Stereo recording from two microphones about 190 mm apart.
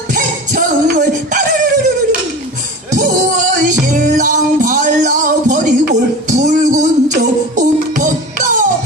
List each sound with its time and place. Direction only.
0.1 s music: 45° right (ahead or behind)
2.9 s music: 40° right (ahead or behind)